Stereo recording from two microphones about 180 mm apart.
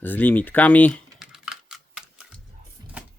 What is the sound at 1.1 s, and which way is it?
Typing, 5° right (ahead or behind).